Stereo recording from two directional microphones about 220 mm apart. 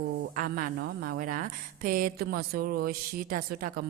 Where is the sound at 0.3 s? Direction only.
40° right (ahead or behind).